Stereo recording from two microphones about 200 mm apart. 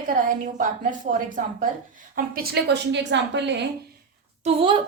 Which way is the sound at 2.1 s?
50° right (ahead or behind).